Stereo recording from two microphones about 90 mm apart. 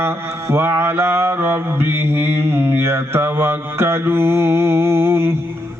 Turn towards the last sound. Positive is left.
turn(degrees=-25)  # may be behind; listen again after turning